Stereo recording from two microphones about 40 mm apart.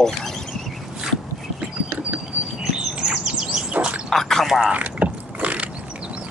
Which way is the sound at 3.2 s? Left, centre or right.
Right.